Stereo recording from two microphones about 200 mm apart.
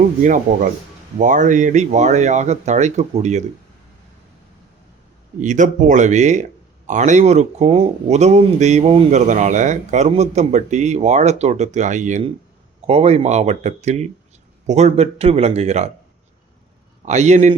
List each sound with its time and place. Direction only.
0.2 s speech: 40° right (ahead or behind)
5.4 s speech: 40° right (ahead or behind)
17.1 s speech: 35° right (ahead or behind)